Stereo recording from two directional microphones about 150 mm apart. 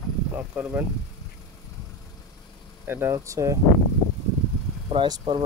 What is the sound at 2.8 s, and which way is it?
Speech, 15° right (ahead or behind).